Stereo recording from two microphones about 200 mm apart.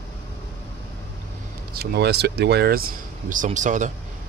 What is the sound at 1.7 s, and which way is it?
Speech, 55° right (ahead or behind).